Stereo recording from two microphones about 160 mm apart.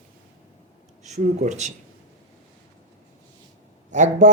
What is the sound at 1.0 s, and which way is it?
Speech, 45° right (ahead or behind).